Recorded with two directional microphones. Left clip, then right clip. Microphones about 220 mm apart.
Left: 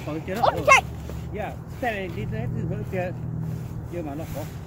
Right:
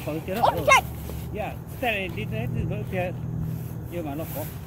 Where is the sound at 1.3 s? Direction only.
25° right (ahead or behind).